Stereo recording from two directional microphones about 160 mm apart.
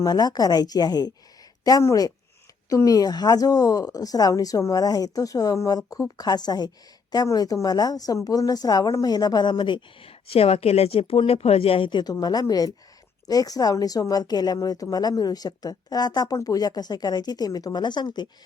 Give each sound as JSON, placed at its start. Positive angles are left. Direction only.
{"t": 0.0, "sound": "a woman's voice", "side_deg": 25}